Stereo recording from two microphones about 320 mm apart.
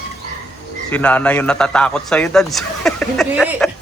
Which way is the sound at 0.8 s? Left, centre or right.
Centre.